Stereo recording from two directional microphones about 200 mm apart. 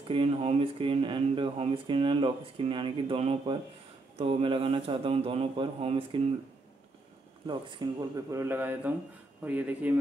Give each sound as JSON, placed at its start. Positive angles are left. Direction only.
{"t": 0.1, "sound": "speech", "side_deg": -30}
{"t": 7.4, "sound": "speech", "side_deg": -25}